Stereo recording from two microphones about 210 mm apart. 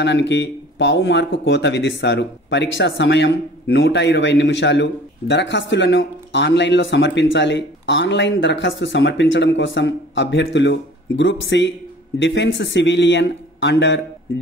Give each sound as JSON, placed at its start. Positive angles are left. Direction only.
{"t": 0.0, "sound": "speech", "side_deg": 55}